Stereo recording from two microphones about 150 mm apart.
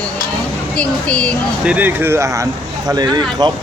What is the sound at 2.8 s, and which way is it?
Speech, 30° right (ahead or behind).